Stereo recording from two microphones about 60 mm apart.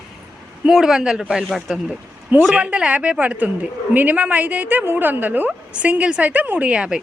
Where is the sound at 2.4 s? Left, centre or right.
Centre.